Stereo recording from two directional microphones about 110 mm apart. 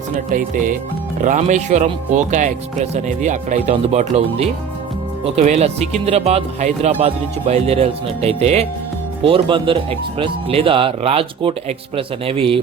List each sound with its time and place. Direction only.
1.4 s speech: 90° right
7.0 s speech: 75° right (ahead or behind)
9.2 s speech: 55° right (ahead or behind)